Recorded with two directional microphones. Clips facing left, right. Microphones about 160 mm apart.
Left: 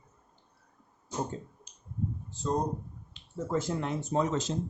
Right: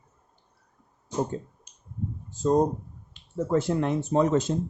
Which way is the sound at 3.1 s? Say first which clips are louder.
Right 7 dB; 60° right (ahead or behind).